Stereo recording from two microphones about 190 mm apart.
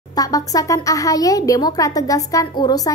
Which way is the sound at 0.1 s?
20° left (ahead or behind).